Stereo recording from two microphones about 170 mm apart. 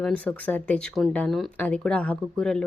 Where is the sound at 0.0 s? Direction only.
5° left (ahead or behind).